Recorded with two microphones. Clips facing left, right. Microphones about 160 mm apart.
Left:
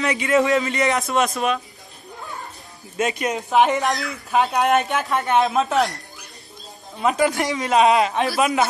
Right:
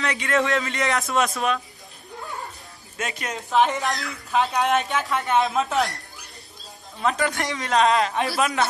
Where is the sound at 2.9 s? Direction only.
20° left (ahead or behind); by 5.6 s centre (ahead or behind).